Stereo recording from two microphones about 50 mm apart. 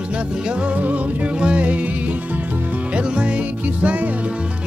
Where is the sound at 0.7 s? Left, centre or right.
Right.